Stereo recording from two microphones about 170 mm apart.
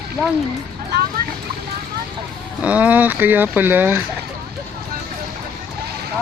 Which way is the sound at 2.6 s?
10° right (ahead or behind).